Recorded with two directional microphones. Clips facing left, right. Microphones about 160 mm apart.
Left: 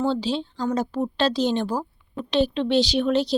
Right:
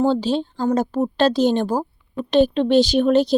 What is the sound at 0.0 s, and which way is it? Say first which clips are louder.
Speech: right 5 dB; 45° right (ahead or behind).